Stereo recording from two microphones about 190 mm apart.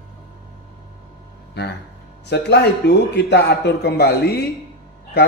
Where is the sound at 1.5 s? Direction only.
60° left (ahead or behind).